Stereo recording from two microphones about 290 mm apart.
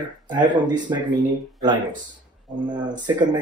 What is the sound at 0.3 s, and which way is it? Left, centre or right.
Speech, centre.